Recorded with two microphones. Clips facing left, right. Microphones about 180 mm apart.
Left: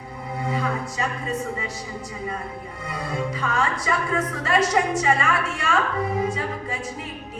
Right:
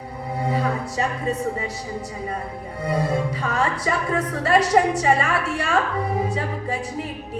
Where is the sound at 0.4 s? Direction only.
35° right (ahead or behind).